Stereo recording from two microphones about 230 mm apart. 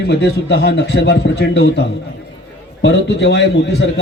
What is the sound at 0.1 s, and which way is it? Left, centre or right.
A man's voice, left.